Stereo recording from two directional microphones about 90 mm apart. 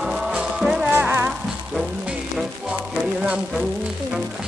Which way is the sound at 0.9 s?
25° right (ahead or behind).